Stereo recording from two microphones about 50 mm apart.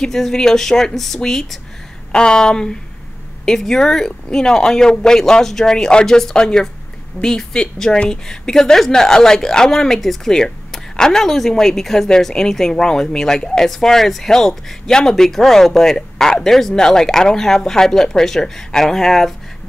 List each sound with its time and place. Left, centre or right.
0.0 s a woman's voice: centre